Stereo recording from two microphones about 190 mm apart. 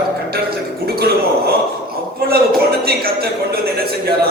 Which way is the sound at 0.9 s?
55° right (ahead or behind).